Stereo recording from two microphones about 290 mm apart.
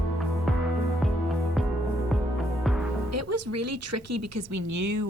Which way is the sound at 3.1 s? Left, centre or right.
Right.